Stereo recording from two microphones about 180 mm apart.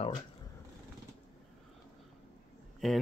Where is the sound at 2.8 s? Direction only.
Centre (ahead or behind).